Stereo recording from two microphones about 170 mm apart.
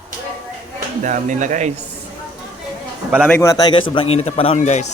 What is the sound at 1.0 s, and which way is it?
Speech, 45° right (ahead or behind).